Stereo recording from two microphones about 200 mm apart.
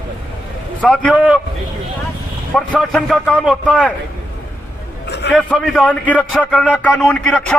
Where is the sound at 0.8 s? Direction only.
5° left (ahead or behind).